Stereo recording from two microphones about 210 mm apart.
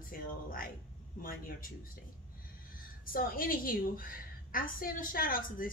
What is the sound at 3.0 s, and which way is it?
A woman's voice, 45° left (ahead or behind).